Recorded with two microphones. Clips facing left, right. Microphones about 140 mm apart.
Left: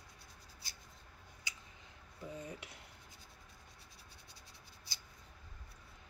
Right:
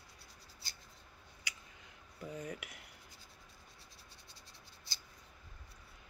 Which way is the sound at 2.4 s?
30° left (ahead or behind).